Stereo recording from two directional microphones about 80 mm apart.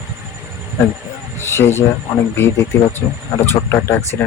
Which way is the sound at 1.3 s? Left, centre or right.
Left.